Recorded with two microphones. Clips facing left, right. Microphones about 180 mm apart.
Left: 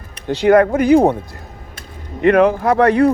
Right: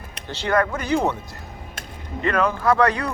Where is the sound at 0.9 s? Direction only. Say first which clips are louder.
Left 10 dB; 55° left (ahead or behind).